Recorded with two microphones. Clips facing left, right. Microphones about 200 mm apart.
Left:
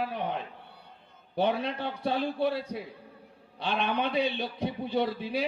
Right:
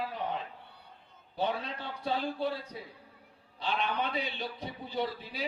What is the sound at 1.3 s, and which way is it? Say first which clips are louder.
A man's voice: left 6 dB; 65° left (ahead or behind).